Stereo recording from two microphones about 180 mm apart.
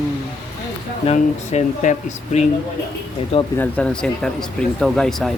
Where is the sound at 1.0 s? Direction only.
40° left (ahead or behind).